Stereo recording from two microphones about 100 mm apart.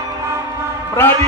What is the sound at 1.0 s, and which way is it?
Speech, 25° left (ahead or behind).